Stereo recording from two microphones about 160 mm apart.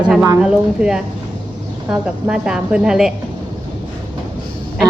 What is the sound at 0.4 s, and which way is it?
A woman's voice, 5° right (ahead or behind).